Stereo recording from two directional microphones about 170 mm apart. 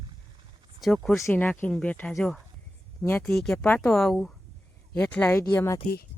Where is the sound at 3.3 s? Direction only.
Centre (ahead or behind).